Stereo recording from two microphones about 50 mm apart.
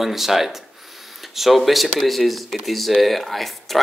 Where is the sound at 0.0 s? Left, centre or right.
Centre.